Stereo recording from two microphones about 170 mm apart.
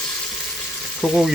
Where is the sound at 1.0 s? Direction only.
Centre (ahead or behind).